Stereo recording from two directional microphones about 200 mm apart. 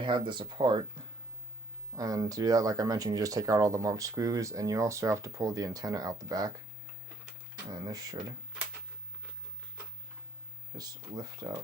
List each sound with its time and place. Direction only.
0.0 s speech: 25° right (ahead or behind)
2.0 s speech: 20° right (ahead or behind)
7.7 s speech: 20° right (ahead or behind)
10.8 s speech: 20° right (ahead or behind)